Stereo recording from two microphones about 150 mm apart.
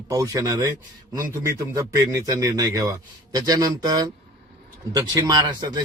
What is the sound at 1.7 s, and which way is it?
Speech, 25° right (ahead or behind).